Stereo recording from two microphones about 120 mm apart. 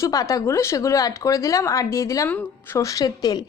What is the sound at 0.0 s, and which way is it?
A woman's voice, 25° left (ahead or behind).